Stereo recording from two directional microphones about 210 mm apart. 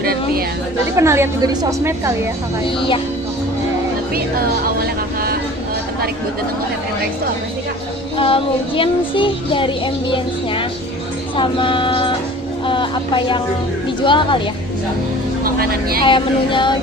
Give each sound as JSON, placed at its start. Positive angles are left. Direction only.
{"t": 0.0, "sound": "chatter", "side_deg": -45}
{"t": 0.9, "sound": "a woman's voice", "side_deg": -10}
{"t": 2.6, "sound": "speech", "side_deg": 25}
{"t": 4.1, "sound": "speech", "side_deg": -45}
{"t": 8.2, "sound": "speech", "side_deg": 25}
{"t": 15.4, "sound": "vehicle", "side_deg": -45}
{"t": 16.0, "sound": "speech", "side_deg": 25}